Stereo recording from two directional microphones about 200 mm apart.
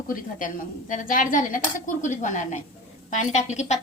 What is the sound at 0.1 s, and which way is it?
A woman's voice, 40° left (ahead or behind).